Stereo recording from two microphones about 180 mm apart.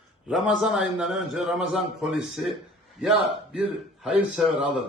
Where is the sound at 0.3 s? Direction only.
Centre (ahead or behind).